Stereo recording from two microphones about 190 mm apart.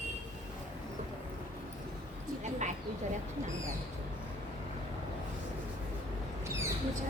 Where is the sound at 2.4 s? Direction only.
40° right (ahead or behind).